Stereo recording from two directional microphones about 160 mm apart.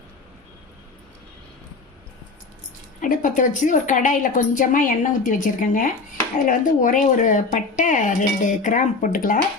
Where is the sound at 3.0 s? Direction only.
55° left (ahead or behind).